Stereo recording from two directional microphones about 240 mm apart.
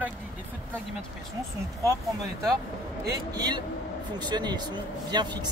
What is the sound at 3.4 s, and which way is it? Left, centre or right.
Speech, centre.